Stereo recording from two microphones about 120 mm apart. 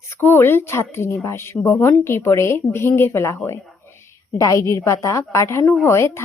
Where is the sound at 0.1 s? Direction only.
20° left (ahead or behind).